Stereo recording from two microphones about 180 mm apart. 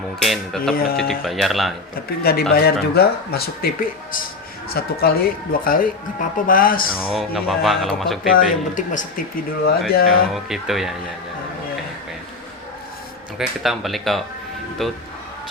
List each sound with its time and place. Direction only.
0.2 s speech: centre (ahead or behind)
0.7 s speech: 55° left (ahead or behind)
1.2 s speech: centre (ahead or behind)
2.5 s speech: 60° left (ahead or behind)
7.1 s speech: 5° right (ahead or behind)
8.3 s speech: 45° left (ahead or behind)
10.3 s speech: centre (ahead or behind)
13.4 s speech: centre (ahead or behind)